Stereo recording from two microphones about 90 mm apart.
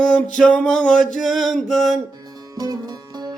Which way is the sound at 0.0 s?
5° left (ahead or behind).